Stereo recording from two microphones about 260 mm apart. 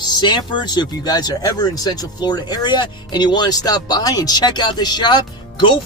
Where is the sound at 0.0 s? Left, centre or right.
Centre.